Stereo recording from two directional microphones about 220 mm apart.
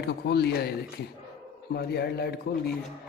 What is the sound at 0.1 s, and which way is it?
Speech, 45° left (ahead or behind).